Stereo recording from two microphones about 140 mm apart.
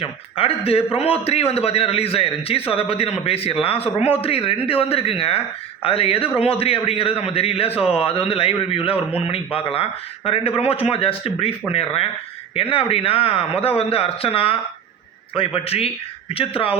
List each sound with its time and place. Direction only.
0.0 s a man's voice: 45° left (ahead or behind)